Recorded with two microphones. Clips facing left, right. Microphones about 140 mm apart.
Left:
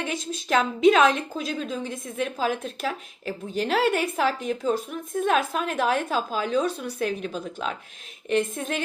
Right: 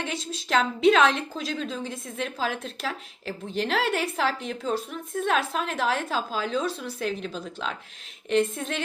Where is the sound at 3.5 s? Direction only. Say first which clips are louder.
Left 3 dB; 45° left (ahead or behind).